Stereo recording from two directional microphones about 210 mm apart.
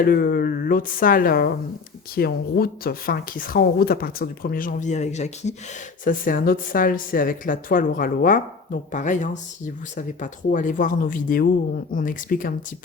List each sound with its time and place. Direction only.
0.0 s speech: 45° left (ahead or behind)